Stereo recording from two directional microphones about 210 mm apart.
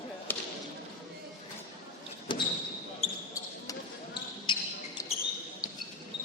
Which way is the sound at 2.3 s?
25° left (ahead or behind).